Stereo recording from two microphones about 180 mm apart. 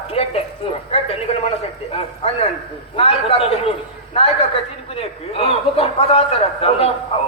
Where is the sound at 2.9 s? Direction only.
35° left (ahead or behind).